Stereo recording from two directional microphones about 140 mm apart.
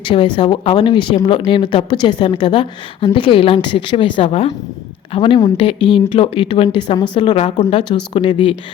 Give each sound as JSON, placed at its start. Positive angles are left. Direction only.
{"t": 0.0, "sound": "speech", "side_deg": 40}